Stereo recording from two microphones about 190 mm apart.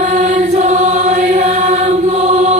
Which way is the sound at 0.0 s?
45° right (ahead or behind).